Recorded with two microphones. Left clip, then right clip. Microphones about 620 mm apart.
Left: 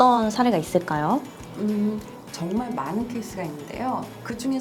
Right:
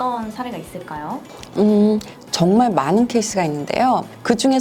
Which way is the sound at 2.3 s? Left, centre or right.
Right.